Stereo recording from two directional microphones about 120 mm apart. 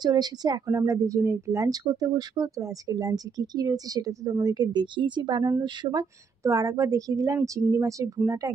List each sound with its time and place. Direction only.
0.0 s a woman's voice: 35° right (ahead or behind)